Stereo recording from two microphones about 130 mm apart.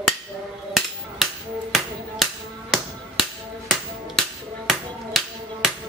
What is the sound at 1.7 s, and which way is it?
Music, centre (ahead or behind).